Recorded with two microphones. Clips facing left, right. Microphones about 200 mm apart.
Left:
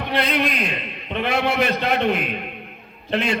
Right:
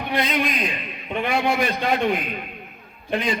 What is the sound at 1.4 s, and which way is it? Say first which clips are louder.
A man's voice: left 2 dB; 65° left (ahead or behind).